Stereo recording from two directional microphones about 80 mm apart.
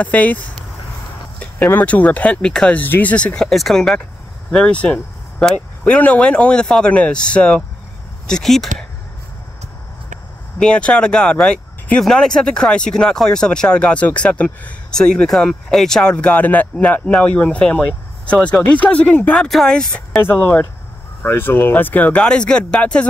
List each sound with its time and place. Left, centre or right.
0.0 s speech: centre
1.4 s speech: centre
2.8 s speech: left
3.4 s speech: centre
10.6 s speech: centre
20.2 s speech: left